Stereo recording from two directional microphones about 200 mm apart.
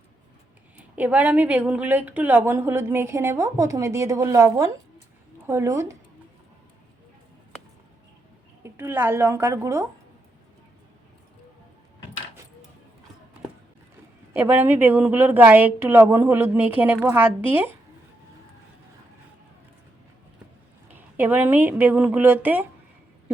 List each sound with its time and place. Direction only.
0.9 s a woman's voice: 5° right (ahead or behind)
8.6 s a woman's voice: 10° right (ahead or behind)
14.3 s a woman's voice: 10° right (ahead or behind)
20.9 s a woman's voice: 10° right (ahead or behind)